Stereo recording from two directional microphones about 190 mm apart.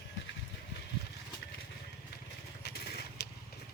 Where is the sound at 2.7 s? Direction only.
60° left (ahead or behind).